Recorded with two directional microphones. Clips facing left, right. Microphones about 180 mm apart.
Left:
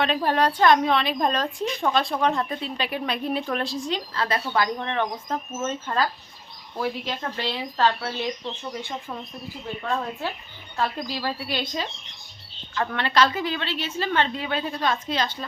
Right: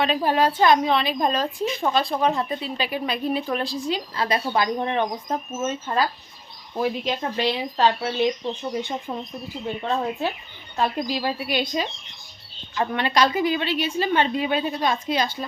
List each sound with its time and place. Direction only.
0.0 s a woman's voice: 5° right (ahead or behind)